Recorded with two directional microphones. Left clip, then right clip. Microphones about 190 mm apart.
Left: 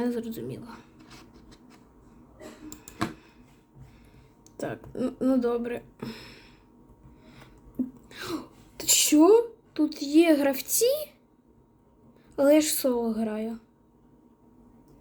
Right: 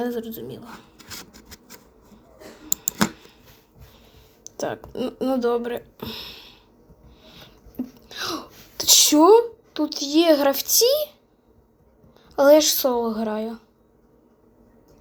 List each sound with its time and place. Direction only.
0.0 s speech: 30° left (ahead or behind)
4.4 s speech: 20° left (ahead or behind)
6.0 s a sound: 35° left (ahead or behind)
8.0 s a sound: 35° left (ahead or behind)
8.8 s a woman's voice: 20° left (ahead or behind)
12.4 s speech: 30° left (ahead or behind)